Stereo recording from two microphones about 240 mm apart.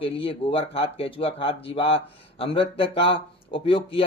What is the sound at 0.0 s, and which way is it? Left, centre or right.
Speech, left.